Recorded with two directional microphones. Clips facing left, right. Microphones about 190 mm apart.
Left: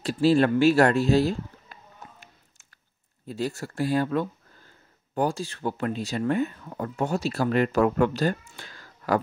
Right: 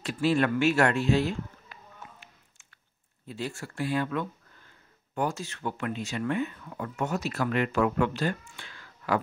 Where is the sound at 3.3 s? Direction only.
40° left (ahead or behind).